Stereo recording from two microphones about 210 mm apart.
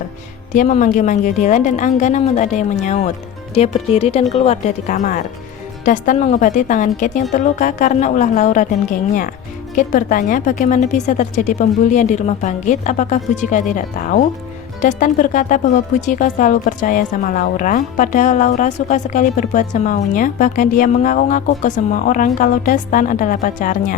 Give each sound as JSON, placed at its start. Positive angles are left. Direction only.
{"t": 0.5, "sound": "speech", "side_deg": 40}